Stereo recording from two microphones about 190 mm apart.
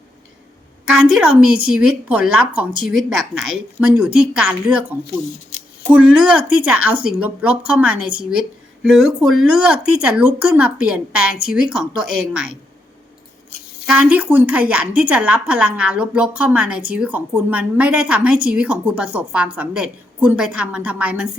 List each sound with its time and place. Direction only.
1.0 s speech: 5° right (ahead or behind)
3.0 s a woman's voice: 90° right
3.8 s a woman's voice: 5° right (ahead or behind)
13.8 s a woman's voice: 5° right (ahead or behind)